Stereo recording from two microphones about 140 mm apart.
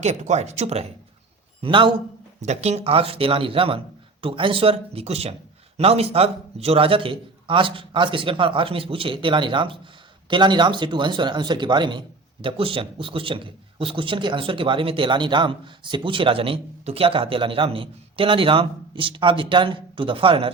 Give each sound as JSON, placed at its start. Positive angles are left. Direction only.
{"t": 0.0, "sound": "speech", "side_deg": -55}
{"t": 1.6, "sound": "speech", "side_deg": -35}
{"t": 2.4, "sound": "speech", "side_deg": -55}